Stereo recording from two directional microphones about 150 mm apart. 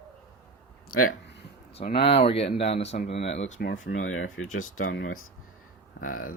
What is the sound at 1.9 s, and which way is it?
Speech, 40° left (ahead or behind).